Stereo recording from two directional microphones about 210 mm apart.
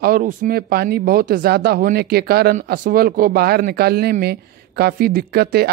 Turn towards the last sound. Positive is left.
turn(degrees=-50)  # may be behind; listen again after turning